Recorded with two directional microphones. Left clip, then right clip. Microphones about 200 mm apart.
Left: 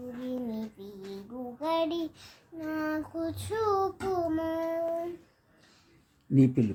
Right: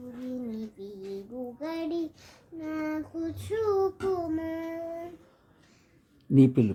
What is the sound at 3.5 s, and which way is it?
Child singing, 10° left (ahead or behind).